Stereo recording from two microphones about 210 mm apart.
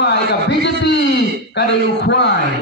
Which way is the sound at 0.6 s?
55° left (ahead or behind).